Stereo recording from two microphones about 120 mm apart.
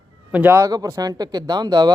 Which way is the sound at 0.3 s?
10° right (ahead or behind).